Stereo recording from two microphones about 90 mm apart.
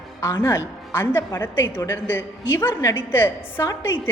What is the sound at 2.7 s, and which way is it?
Speech, 35° left (ahead or behind).